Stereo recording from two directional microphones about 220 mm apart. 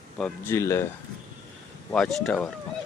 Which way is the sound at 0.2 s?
10° left (ahead or behind).